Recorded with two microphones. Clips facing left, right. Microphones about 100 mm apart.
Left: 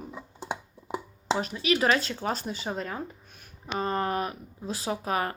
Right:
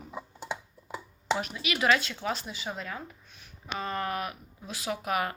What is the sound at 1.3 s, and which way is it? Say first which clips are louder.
Speech: left 6 dB; 35° left (ahead or behind).